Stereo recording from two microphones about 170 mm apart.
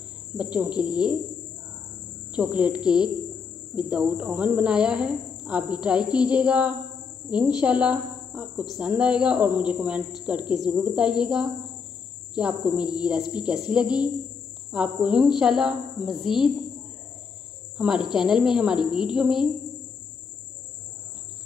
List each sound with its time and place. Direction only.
0.4 s cricket: 5° right (ahead or behind)
2.3 s cricket: 5° right (ahead or behind)
6.1 s a sound: 5° right (ahead or behind)
7.2 s a woman's voice: 5° right (ahead or behind)
9.2 s a sound: 5° right (ahead or behind)
11.2 s cricket: 5° right (ahead or behind)
12.4 s a sound: 5° right (ahead or behind)
12.9 s cricket: 5° right (ahead or behind)
14.7 s a sound: 5° right (ahead or behind)
15.4 s cricket: 5° right (ahead or behind)
17.7 s speech: 5° right (ahead or behind)
18.1 s cricket: 5° right (ahead or behind)
18.8 s a woman's voice: 30° left (ahead or behind)
19.1 s cricket: 5° right (ahead or behind)